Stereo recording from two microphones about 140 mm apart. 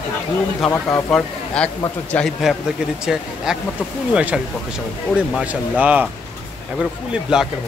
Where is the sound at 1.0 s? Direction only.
5° left (ahead or behind).